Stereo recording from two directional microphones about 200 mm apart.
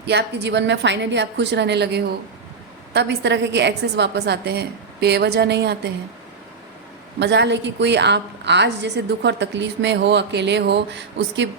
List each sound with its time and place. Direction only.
0.0 s a woman's voice: 55° right (ahead or behind)
7.2 s a woman's voice: 60° right (ahead or behind)